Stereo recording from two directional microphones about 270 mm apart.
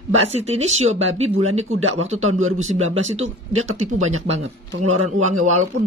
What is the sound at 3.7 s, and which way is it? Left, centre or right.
Speech, right.